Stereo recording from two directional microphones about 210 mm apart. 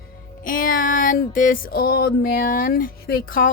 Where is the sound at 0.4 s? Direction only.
40° left (ahead or behind).